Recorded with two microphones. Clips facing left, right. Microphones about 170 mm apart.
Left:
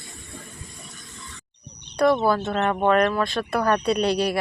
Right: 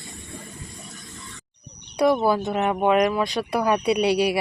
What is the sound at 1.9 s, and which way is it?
Speech, 10° right (ahead or behind).